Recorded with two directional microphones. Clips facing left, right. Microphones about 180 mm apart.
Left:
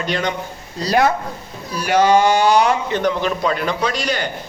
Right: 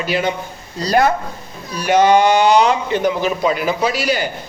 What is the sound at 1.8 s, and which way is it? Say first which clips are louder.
Speech: right 2 dB; 20° right (ahead or behind).